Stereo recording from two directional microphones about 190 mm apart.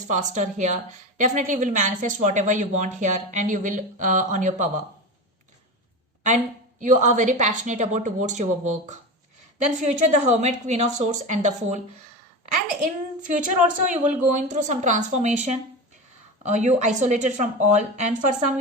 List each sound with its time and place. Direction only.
0.1 s speech: 40° right (ahead or behind)
6.2 s speech: 40° right (ahead or behind)
12.8 s speech: 40° right (ahead or behind)